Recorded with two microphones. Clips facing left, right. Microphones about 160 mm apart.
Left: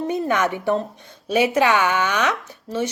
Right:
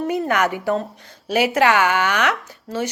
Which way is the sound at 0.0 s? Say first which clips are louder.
Right 1 dB; 25° left (ahead or behind).